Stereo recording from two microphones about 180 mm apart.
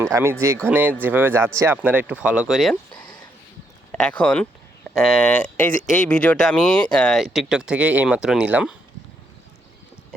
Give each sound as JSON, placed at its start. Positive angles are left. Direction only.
{"t": 0.0, "sound": "speech", "side_deg": -15}